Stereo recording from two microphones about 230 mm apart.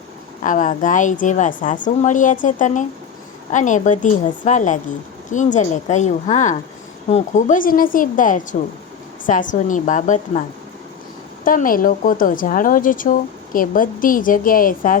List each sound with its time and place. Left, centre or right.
0.4 s speech: left
11.4 s speech: left